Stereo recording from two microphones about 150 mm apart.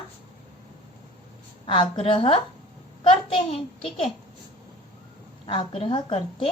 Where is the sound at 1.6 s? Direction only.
35° left (ahead or behind).